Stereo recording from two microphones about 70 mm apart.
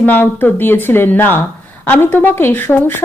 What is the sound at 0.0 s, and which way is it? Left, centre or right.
Speech, left.